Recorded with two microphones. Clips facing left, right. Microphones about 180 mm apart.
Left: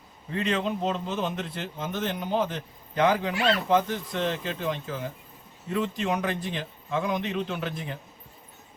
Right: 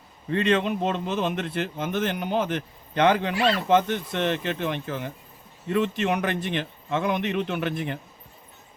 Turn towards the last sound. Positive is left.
turn(degrees=-65)  # may be behind; listen again after turning